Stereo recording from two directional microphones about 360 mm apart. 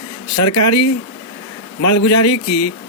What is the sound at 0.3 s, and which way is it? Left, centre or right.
Speech, left.